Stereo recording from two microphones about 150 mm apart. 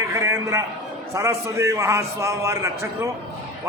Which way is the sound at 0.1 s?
20° right (ahead or behind).